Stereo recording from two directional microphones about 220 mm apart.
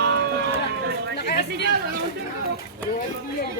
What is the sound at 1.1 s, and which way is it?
Chatter, 50° left (ahead or behind).